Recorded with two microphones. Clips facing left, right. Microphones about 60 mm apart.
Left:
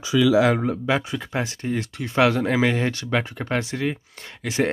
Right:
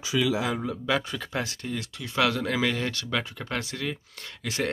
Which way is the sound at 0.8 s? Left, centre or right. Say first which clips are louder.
Left 4 dB; centre.